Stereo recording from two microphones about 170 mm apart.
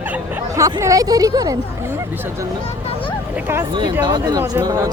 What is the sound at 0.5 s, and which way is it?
Speech, 20° right (ahead or behind).